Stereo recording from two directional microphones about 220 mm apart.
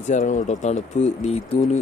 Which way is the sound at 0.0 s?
35° left (ahead or behind).